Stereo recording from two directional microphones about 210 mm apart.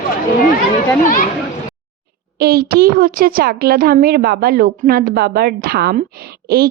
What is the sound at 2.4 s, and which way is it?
A woman's voice, 45° right (ahead or behind).